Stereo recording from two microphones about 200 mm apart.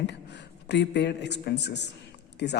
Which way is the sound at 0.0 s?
60° left (ahead or behind).